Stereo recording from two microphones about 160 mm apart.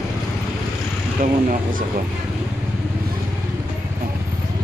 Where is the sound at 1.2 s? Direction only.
55° right (ahead or behind).